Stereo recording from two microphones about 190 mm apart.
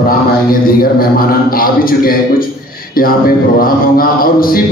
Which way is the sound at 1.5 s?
50° left (ahead or behind).